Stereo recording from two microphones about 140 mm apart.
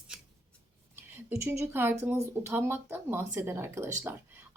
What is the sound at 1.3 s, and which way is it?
Speech, 20° right (ahead or behind).